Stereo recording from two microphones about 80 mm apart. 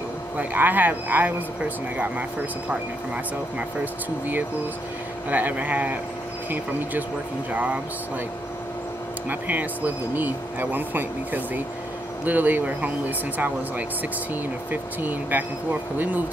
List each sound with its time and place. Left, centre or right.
0.4 s speech: right
3.5 s speech: right
9.3 s speech: right